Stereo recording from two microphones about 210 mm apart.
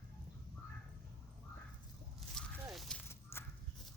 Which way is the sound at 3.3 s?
10° left (ahead or behind).